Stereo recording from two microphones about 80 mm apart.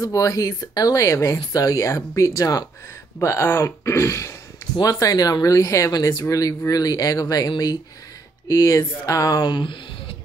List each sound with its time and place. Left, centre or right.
0.0 s speech: left
4.9 s speech: left
8.5 s speech: left
9.4 s speech: left